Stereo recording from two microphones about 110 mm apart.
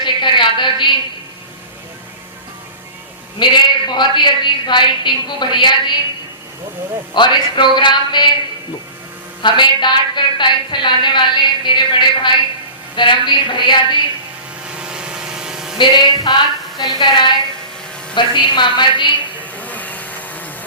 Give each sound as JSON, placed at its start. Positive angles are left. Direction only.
{"t": 0.0, "sound": "a sound", "side_deg": 45}
{"t": 3.3, "sound": "a woman's voice", "side_deg": 45}
{"t": 7.1, "sound": "a woman's voice", "side_deg": 45}
{"t": 9.4, "sound": "a woman's voice", "side_deg": 45}
{"t": 14.7, "sound": "vehicle", "side_deg": -10}
{"t": 15.8, "sound": "a woman's voice", "side_deg": 45}
{"t": 19.4, "sound": "a sound", "side_deg": 15}